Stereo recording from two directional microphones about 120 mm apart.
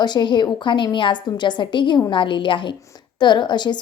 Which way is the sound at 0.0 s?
35° left (ahead or behind).